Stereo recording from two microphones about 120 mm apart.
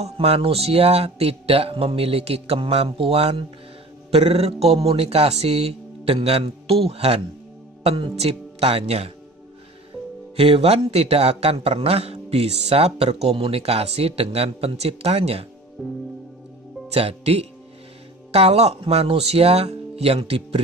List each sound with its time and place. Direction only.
0.0 s a man's voice: 55° right (ahead or behind)
10.3 s a man's voice: 55° right (ahead or behind)
16.9 s a man's voice: 60° right (ahead or behind)